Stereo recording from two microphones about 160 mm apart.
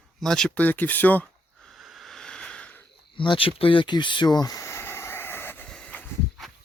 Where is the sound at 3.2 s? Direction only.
35° left (ahead or behind).